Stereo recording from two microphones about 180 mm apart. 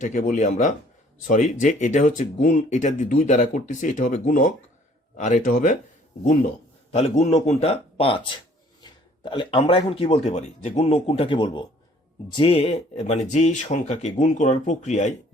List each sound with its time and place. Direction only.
0.0 s speech: 45° left (ahead or behind)
6.9 s speech: 35° left (ahead or behind)